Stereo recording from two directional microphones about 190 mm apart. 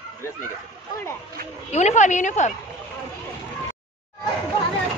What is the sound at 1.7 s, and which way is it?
Speech, 35° left (ahead or behind).